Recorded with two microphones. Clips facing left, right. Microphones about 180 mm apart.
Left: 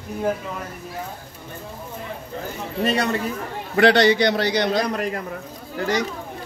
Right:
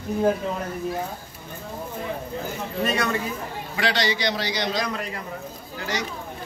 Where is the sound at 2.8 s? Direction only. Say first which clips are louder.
Left 3 dB; 30° left (ahead or behind).